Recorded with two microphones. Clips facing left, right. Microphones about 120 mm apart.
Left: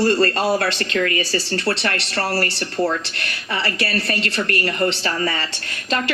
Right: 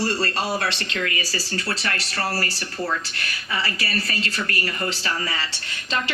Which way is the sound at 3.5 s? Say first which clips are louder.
Left 4 dB; 65° left (ahead or behind).